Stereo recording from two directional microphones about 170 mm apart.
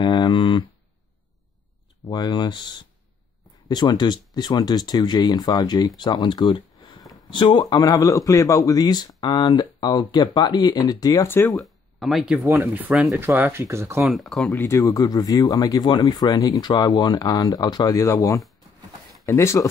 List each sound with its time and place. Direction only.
0.0 s a sound: 25° left (ahead or behind)
2.0 s speech: 25° left (ahead or behind)
11.4 s speech: centre (ahead or behind); by 14.0 s 15° right (ahead or behind)
14.0 s speech: centre (ahead or behind)
14.6 s speech: 20° left (ahead or behind)